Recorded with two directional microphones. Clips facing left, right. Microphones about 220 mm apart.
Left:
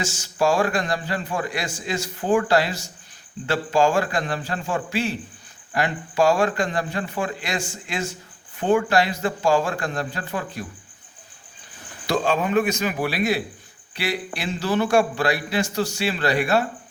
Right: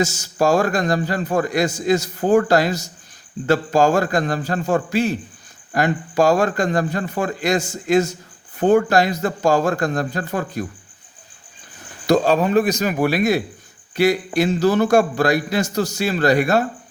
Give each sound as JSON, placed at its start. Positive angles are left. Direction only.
{"t": 0.0, "sound": "a man's voice", "side_deg": -40}
{"t": 12.0, "sound": "a man's voice", "side_deg": -40}